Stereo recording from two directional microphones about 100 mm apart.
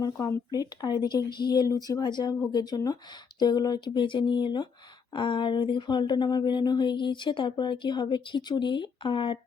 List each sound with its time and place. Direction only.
0.0 s speech: 40° left (ahead or behind); by 9.4 s 60° left (ahead or behind)